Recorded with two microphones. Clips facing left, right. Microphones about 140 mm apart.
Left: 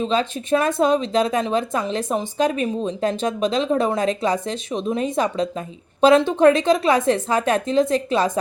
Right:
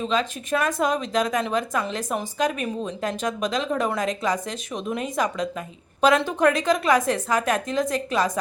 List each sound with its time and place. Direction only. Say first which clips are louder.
0.0 s speech: left 3 dB; 30° left (ahead or behind)